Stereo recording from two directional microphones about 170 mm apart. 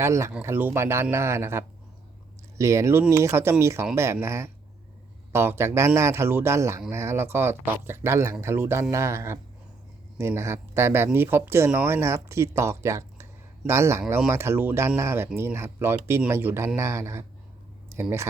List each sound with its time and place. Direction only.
0.0 s speech: 15° right (ahead or behind)